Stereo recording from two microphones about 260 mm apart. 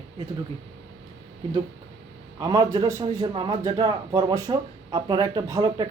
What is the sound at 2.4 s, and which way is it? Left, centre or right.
Speech, centre.